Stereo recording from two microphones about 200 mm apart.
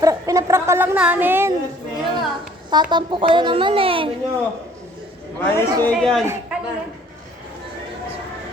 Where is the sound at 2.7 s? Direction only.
20° right (ahead or behind).